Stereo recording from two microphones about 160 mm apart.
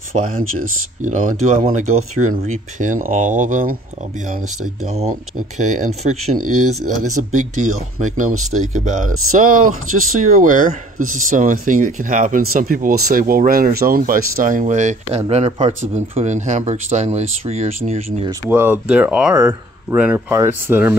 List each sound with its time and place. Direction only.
0.1 s speech: 45° right (ahead or behind)
4.8 s speech: 40° right (ahead or behind)
18.5 s speech: 15° right (ahead or behind)
19.3 s speech: 20° right (ahead or behind)